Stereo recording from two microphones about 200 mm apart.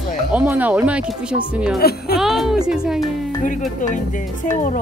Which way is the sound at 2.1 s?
Centre (ahead or behind).